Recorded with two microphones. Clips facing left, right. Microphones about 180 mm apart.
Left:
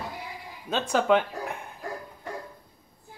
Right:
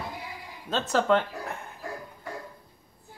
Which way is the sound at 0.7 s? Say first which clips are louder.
Left 1 dB; 10° left (ahead or behind).